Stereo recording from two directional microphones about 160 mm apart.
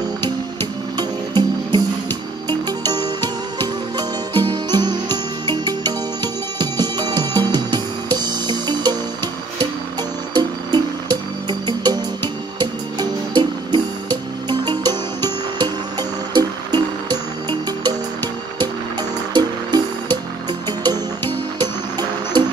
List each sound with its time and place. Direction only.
0.9 s music: 25° right (ahead or behind)
10.3 s music: 25° right (ahead or behind)
21.5 s music: 25° right (ahead or behind)